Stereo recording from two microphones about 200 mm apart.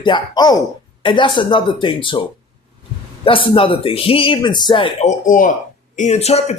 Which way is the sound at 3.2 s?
25° left (ahead or behind).